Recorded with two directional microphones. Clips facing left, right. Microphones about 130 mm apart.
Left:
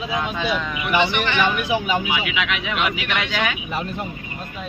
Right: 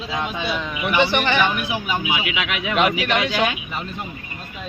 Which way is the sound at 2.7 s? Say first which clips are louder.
Right 8 dB; 40° right (ahead or behind).